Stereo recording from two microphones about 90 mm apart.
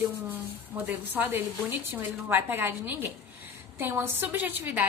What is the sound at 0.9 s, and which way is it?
A woman's voice, 20° right (ahead or behind).